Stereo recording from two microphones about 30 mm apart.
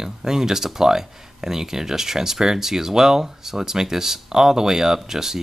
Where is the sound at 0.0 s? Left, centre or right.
Centre.